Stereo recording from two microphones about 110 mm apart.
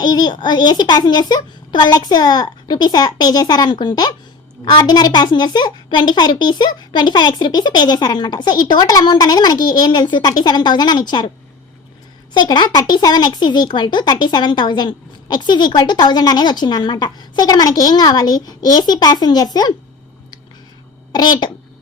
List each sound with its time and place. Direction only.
0.0 s speech: 40° left (ahead or behind)
12.4 s speech: 40° left (ahead or behind)
21.1 s a sound: 40° left (ahead or behind)